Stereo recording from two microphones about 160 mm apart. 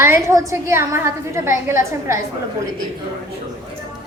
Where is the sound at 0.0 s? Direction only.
15° right (ahead or behind).